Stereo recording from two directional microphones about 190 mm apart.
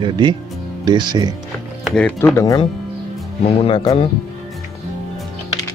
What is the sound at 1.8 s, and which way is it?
Speech, 5° left (ahead or behind).